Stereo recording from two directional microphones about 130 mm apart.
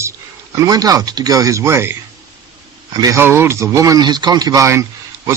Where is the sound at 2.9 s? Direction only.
30° right (ahead or behind).